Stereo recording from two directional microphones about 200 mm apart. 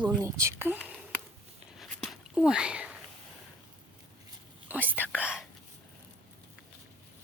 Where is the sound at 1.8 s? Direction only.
Centre (ahead or behind).